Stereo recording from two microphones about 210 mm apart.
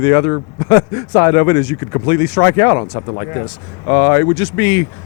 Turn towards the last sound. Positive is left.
turn(degrees=15)  # may be behind; listen again after turning